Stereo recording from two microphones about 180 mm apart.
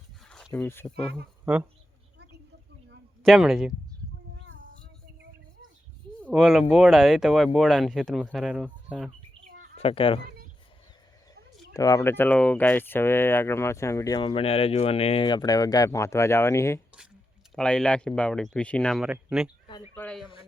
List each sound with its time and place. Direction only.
0.3 s speech: 5° left (ahead or behind)
3.2 s speech: 5° right (ahead or behind)
6.2 s speech: centre (ahead or behind)
9.7 s speech: 30° left (ahead or behind)
11.7 s speech: 20° left (ahead or behind)
17.5 s speech: 5° left (ahead or behind)
19.9 s speech: 5° left (ahead or behind)